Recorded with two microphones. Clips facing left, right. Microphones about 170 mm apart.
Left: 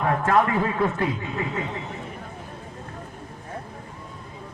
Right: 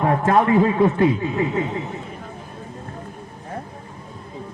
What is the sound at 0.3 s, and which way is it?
Speech, 25° right (ahead or behind).